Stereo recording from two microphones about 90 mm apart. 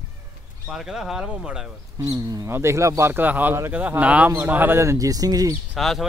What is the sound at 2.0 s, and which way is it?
Speech, 40° right (ahead or behind).